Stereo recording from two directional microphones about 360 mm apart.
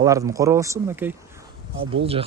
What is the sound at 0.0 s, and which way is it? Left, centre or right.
Speech, centre.